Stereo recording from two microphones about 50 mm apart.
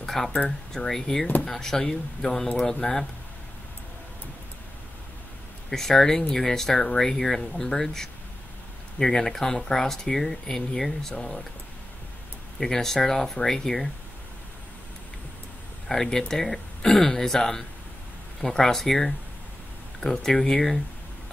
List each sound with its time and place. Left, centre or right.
0.0 s a sound: centre
0.5 s speech: centre
5.7 s speech: centre
12.5 s speech: centre
15.9 s speech: centre
20.2 s speech: centre